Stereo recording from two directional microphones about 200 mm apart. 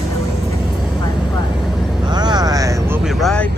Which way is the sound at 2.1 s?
20° right (ahead or behind).